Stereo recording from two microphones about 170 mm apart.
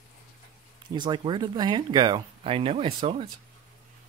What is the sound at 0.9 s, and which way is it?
Speech, 25° right (ahead or behind).